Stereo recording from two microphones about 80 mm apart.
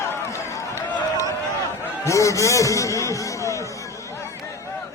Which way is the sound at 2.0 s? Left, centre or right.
Left.